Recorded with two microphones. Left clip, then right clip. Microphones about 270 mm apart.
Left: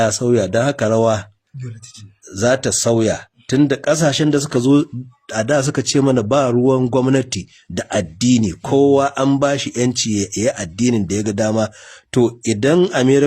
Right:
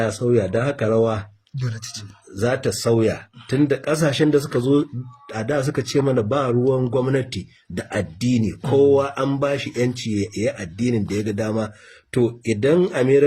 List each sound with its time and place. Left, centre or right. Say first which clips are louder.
0.0 s a man's voice: left 4 dB; left
2.3 s a man's voice: left 5 dB; left